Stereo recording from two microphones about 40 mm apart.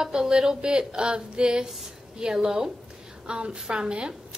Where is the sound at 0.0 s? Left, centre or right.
Centre.